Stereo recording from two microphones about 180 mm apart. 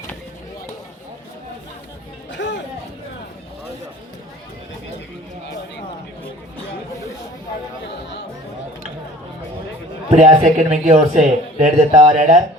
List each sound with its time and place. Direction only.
2.3 s music: 75° left (ahead or behind)
10.1 s speech: 40° right (ahead or behind)